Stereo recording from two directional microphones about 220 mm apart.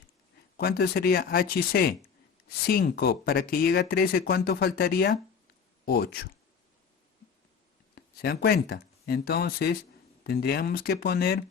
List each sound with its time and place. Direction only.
0.5 s speech: 45° left (ahead or behind)
7.9 s speech: 45° left (ahead or behind)